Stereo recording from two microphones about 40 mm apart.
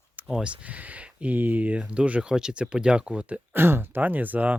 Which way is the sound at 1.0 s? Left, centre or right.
Right.